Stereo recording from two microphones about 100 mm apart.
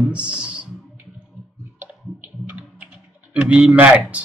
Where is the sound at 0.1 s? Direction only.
10° right (ahead or behind).